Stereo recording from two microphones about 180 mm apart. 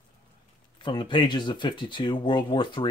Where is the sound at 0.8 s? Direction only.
25° left (ahead or behind).